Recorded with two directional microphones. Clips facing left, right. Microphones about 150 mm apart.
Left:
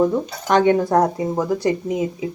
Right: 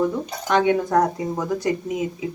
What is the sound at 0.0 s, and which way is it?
Speech, 40° left (ahead or behind).